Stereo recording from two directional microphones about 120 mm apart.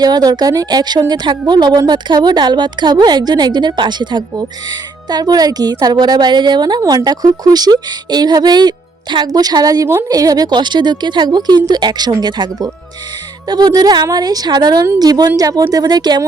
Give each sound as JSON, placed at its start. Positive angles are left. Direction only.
{"t": 0.0, "sound": "a woman's voice", "side_deg": -35}